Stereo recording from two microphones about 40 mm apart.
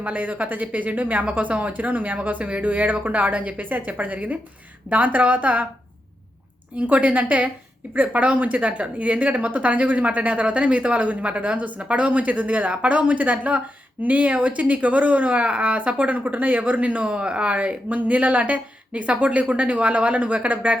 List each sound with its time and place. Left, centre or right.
0.0 s speech: right
6.7 s speech: right